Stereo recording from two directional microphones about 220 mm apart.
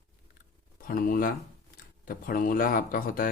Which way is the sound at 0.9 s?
40° left (ahead or behind).